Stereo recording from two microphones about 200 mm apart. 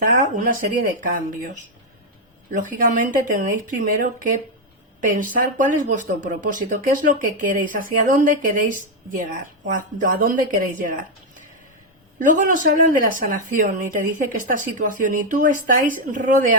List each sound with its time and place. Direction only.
0.0 s speech: 40° right (ahead or behind)
2.5 s speech: 40° right (ahead or behind)
12.2 s speech: 40° right (ahead or behind)